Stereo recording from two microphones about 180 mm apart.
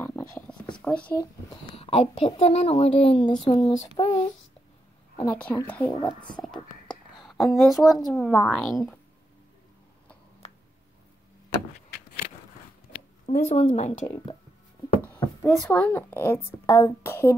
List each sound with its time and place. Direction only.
0.0 s a sound: 15° left (ahead or behind)
0.7 s speech: 5° left (ahead or behind)
1.8 s speech: 35° left (ahead or behind)
5.1 s a woman's voice: 10° left (ahead or behind)
6.0 s whispering: 5° left (ahead or behind)
7.8 s a woman's voice: centre (ahead or behind)
13.3 s speech: 40° left (ahead or behind)
15.4 s a woman's voice: 5° left (ahead or behind)